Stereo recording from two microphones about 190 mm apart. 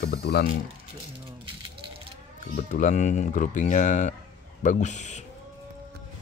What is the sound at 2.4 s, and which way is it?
Speech, 45° left (ahead or behind).